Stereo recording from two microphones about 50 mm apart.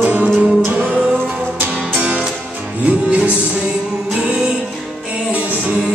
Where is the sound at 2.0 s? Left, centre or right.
Right.